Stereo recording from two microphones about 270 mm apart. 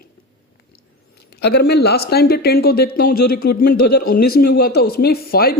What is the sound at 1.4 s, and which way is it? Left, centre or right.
Speech, left.